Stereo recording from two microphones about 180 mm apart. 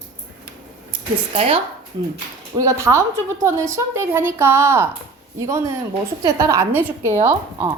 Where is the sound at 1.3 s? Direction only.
35° right (ahead or behind).